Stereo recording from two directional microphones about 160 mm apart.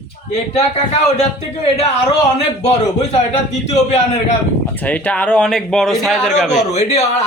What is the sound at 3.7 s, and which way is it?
Speech, 45° left (ahead or behind).